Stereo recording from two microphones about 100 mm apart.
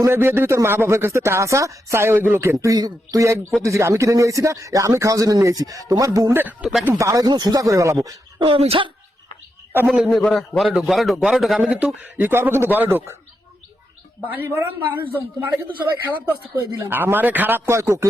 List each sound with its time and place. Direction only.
0.0 s speech: 25° right (ahead or behind)
2.6 s speech: 40° right (ahead or behind)
6.3 s speech: 15° right (ahead or behind)
7.0 s speech: 35° right (ahead or behind)
8.4 s speech: 70° right (ahead or behind)
9.8 s speech: 5° right (ahead or behind)
11.7 s speech: 15° right (ahead or behind)
14.3 s speech: 20° right (ahead or behind)
16.0 s speech: 20° right (ahead or behind)
17.7 s speech: 30° right (ahead or behind)